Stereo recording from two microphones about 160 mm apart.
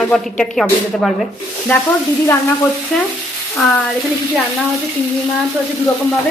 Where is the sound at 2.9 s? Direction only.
5° left (ahead or behind).